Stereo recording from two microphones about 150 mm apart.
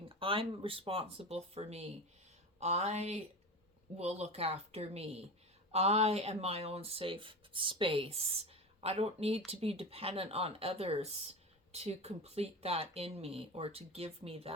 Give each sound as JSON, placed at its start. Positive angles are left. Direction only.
{"t": 0.0, "sound": "speech", "side_deg": -35}